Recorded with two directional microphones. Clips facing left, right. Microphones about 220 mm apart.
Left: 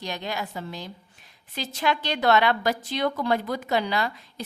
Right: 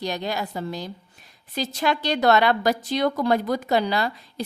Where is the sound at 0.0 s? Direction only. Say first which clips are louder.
Right 4 dB; 35° right (ahead or behind).